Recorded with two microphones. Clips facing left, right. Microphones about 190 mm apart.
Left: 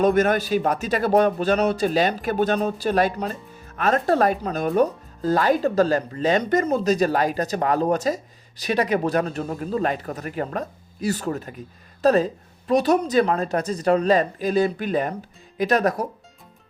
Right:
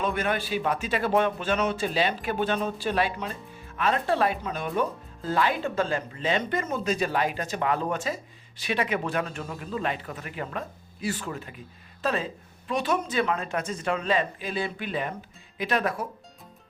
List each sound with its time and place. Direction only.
0.0 s speech: 45° left (ahead or behind)